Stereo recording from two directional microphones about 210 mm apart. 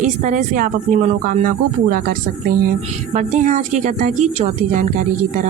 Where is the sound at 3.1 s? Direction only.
35° right (ahead or behind).